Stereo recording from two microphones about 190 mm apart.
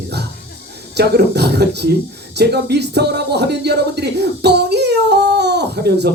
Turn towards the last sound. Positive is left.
turn(degrees=-60)  # may be behind; listen again after turning